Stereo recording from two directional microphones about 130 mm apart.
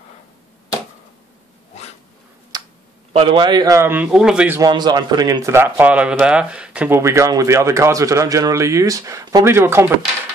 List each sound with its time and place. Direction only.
2.5 s a sound: 30° right (ahead or behind)
3.1 s speech: 45° right (ahead or behind); by 4.5 s 5° right (ahead or behind)
4.6 s a man's voice: 30° right (ahead or behind); by 7.0 s 10° right (ahead or behind)
7.0 s speech: 20° right (ahead or behind)